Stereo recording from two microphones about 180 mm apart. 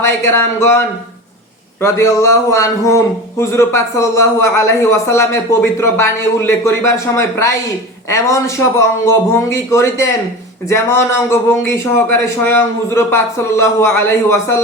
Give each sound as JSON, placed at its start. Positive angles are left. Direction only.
{"t": 0.0, "sound": "a man's voice", "side_deg": 15}